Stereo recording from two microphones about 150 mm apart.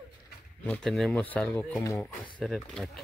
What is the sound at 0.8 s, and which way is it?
Speech, centre (ahead or behind).